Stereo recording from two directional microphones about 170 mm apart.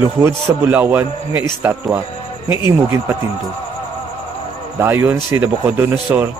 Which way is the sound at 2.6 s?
15° right (ahead or behind).